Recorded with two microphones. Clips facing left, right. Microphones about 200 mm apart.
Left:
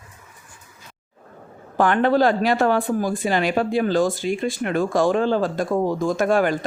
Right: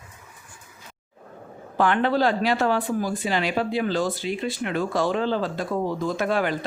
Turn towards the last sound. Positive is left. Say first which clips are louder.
# left 5 dB
turn(degrees=45)  # may be behind; listen again after turning